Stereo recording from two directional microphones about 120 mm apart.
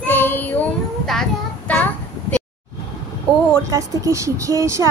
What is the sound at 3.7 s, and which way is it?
A woman's voice, 25° right (ahead or behind).